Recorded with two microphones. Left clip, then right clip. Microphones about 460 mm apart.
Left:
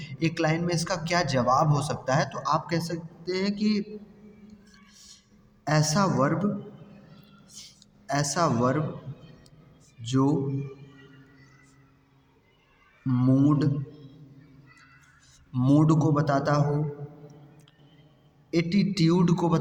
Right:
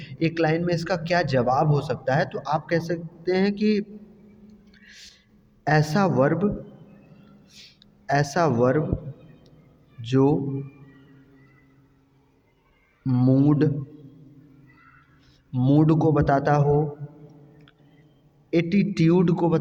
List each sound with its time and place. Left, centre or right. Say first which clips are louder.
0.0 s a man's voice: right 4 dB; right
4.9 s a sound: right 7 dB; right
5.6 s a man's voice: right 3 dB; right
7.5 s a sound: left 1 dB; right
10.0 s a man's voice: right 5 dB; right
13.1 s a man's voice: right 3 dB; right
15.5 s a man's voice: right 2 dB; right
18.5 s a man's voice: right 3 dB; right